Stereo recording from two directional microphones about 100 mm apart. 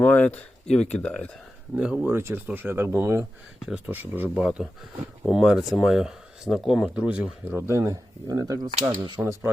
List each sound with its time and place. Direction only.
0.0 s speech: 15° left (ahead or behind)
1.7 s speech: 10° right (ahead or behind)
2.1 s speech: 20° right (ahead or behind); by 6.9 s centre (ahead or behind)
6.9 s speech: 15° right (ahead or behind)
7.5 s speech: 30° right (ahead or behind)
9.2 s speech: 25° right (ahead or behind)